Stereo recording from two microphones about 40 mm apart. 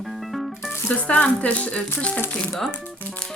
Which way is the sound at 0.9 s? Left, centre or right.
Left.